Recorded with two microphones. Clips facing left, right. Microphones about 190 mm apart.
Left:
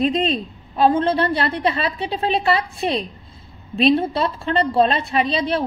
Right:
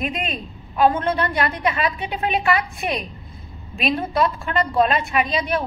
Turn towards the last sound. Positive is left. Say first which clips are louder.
# left 2 dB
turn(degrees=30)  # may be behind; listen again after turning